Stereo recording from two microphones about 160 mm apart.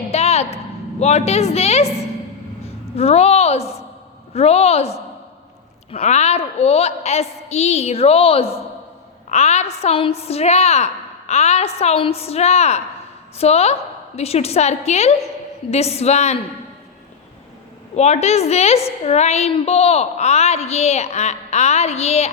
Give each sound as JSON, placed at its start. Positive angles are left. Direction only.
{"t": 0.1, "sound": "a woman's voice", "side_deg": 40}
{"t": 5.9, "sound": "a woman's voice", "side_deg": 45}
{"t": 17.9, "sound": "a woman's voice", "side_deg": 45}